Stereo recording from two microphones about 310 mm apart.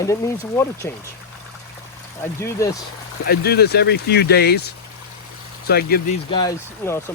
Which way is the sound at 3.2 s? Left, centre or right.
Left.